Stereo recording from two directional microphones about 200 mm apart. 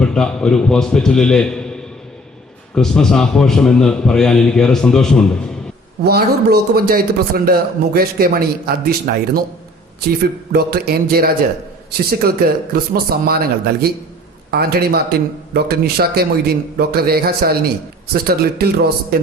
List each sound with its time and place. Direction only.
0.0 s a man's voice: 5° left (ahead or behind)
6.1 s a man's voice: 50° right (ahead or behind)